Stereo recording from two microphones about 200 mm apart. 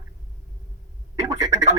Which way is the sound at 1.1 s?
15° right (ahead or behind).